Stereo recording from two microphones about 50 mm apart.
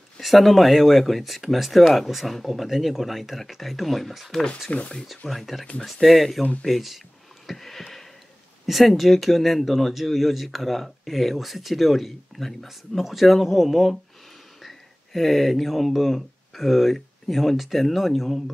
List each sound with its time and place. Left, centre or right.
0.2 s speech: centre
4.6 s speech: left
5.3 s speech: centre
7.4 s a sound: centre
8.6 s speech: centre